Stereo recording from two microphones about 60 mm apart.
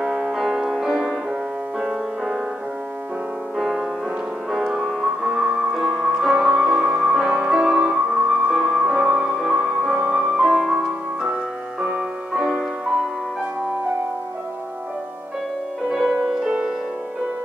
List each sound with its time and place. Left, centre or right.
0.0 s music: centre
1.8 s music: centre
3.5 s music: centre
15.9 s music: centre
16.2 s music: centre